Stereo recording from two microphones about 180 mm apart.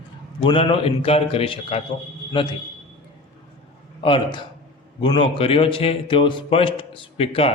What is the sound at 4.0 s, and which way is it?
A man's voice, 30° left (ahead or behind).